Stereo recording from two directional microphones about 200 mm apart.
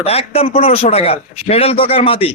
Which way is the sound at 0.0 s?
30° left (ahead or behind).